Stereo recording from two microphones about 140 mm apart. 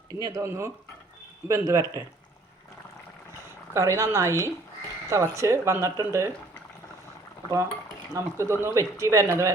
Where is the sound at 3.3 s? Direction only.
20° right (ahead or behind).